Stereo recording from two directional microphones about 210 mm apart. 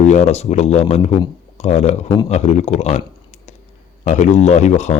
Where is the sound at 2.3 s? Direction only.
30° left (ahead or behind).